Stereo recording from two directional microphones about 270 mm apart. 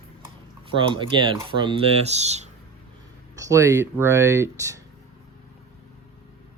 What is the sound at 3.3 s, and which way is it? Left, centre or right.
Speech, centre.